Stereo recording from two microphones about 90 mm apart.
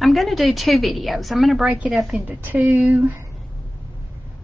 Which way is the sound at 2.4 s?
20° right (ahead or behind).